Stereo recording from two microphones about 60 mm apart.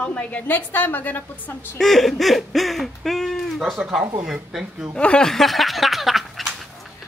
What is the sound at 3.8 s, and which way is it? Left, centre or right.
Speech, centre.